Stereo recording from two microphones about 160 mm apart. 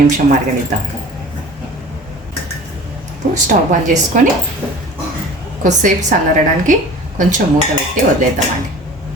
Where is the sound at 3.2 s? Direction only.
60° right (ahead or behind).